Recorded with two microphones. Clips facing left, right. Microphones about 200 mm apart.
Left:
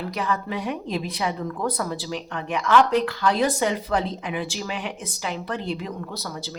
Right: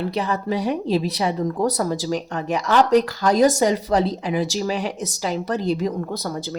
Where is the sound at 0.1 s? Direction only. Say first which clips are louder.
Right 4 dB; 35° right (ahead or behind); by 6.6 s 50° right (ahead or behind).